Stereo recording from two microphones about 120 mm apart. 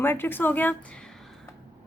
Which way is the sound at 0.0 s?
20° left (ahead or behind).